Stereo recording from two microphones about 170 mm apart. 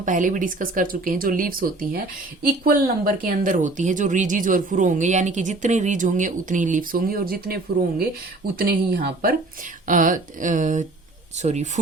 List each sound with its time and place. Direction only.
0.0 s speech: 50° right (ahead or behind)
9.8 s speech: 50° right (ahead or behind)